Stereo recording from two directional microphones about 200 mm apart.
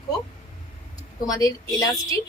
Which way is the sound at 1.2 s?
15° left (ahead or behind).